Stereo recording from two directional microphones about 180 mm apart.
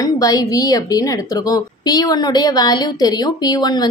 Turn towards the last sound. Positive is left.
turn(degrees=20)  # may be behind; listen again after turning